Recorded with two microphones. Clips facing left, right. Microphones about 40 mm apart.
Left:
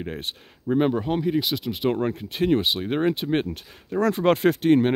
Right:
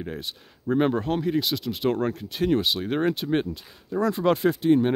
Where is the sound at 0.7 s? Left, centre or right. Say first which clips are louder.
Left 1 dB; centre.